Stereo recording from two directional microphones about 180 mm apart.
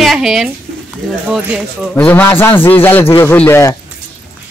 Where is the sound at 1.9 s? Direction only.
10° left (ahead or behind).